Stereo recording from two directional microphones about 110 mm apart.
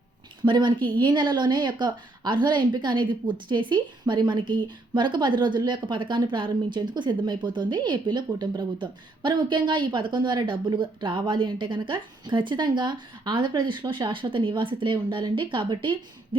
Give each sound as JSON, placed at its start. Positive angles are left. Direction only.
{"t": 0.4, "sound": "a woman's voice", "side_deg": -45}